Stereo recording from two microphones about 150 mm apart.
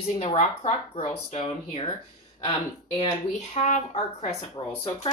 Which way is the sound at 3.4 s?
50° left (ahead or behind).